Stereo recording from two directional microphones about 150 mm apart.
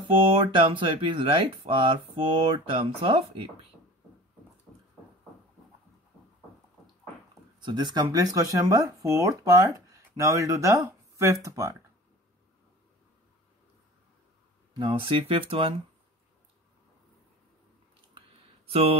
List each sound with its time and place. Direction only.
0.5 s speech: 35° right (ahead or behind)
4.7 s a sound: 15° right (ahead or behind)
7.6 s speech: 30° right (ahead or behind)
14.8 s speech: 30° right (ahead or behind)
18.2 s a sound: 35° right (ahead or behind)
18.7 s speech: 40° right (ahead or behind)